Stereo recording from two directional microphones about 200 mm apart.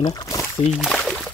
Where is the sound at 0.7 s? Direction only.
Centre (ahead or behind).